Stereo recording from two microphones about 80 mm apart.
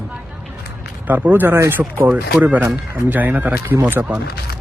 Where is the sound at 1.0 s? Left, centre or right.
Right.